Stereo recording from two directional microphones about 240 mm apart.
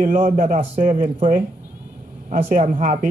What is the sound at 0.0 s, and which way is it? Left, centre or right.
Speech, right.